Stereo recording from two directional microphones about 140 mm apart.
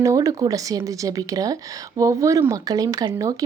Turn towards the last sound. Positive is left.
turn(degrees=-25)  # may be behind; listen again after turning